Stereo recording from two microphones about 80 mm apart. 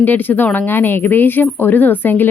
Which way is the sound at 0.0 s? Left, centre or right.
Left.